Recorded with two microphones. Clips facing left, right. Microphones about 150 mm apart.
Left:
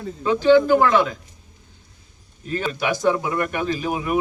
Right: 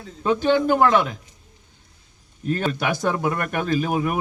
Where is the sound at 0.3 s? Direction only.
50° right (ahead or behind).